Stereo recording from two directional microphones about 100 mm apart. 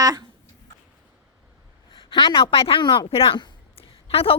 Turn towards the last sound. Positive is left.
turn(degrees=70)  # may be behind; listen again after turning